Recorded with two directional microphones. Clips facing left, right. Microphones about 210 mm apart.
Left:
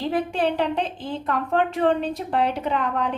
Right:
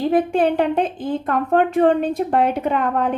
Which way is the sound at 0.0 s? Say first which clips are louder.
Right 6 dB; 50° right (ahead or behind).